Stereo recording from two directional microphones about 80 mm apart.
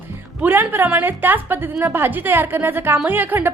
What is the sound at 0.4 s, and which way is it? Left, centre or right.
A woman's voice, right.